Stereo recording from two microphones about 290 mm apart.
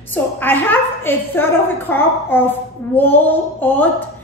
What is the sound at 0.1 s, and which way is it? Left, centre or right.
A woman's voice, centre.